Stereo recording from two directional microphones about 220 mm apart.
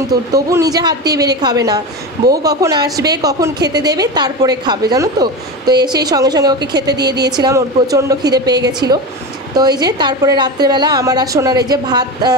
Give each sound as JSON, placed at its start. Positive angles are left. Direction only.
{"t": 0.3, "sound": "a woman's voice", "side_deg": -15}